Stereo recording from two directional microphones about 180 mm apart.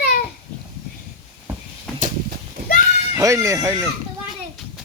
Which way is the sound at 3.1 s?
15° right (ahead or behind).